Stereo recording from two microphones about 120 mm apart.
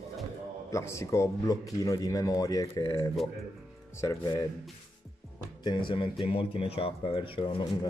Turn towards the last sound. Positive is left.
turn(degrees=45)  # may be behind; listen again after turning